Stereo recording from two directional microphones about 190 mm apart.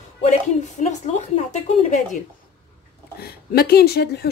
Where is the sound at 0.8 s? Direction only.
40° left (ahead or behind).